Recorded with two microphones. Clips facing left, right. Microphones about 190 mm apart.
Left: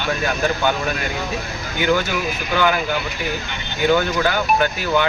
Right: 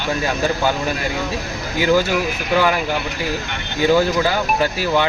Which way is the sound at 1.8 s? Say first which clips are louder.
Right 3 dB; 30° right (ahead or behind).